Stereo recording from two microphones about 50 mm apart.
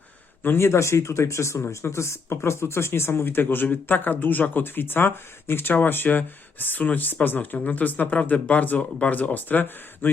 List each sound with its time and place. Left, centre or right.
0.4 s speech: left
8.8 s speech: left
9.1 s speech: left